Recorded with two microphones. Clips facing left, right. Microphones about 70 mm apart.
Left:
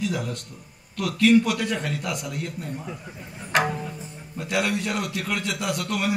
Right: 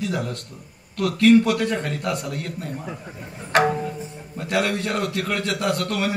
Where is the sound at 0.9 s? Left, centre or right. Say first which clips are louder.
Right 3 dB; right.